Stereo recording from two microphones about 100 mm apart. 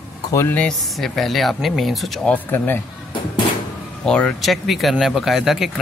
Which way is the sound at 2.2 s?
15° left (ahead or behind).